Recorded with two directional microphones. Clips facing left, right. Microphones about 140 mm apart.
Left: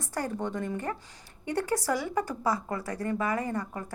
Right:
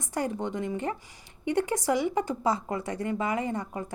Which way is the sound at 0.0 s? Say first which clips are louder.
Right 2 dB; 20° right (ahead or behind).